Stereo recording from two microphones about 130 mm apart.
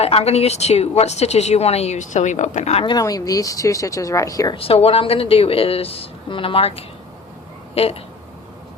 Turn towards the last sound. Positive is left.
turn(degrees=50)  # may be behind; listen again after turning